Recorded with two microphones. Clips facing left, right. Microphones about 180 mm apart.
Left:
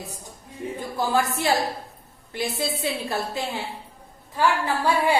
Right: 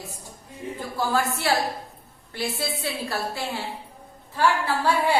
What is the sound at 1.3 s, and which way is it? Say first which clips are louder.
A woman's voice: left 1 dB; 20° left (ahead or behind).